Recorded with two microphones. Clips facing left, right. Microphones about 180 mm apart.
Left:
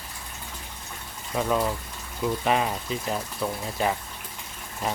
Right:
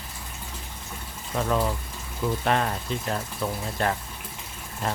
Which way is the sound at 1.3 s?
5° left (ahead or behind).